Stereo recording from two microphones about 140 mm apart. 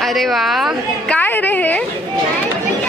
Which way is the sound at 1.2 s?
15° left (ahead or behind).